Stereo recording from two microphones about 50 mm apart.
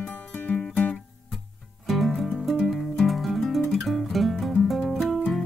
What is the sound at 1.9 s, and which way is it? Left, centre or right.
Music, centre.